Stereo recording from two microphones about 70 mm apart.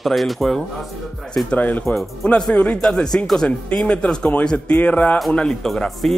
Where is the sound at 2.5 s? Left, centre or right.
Centre.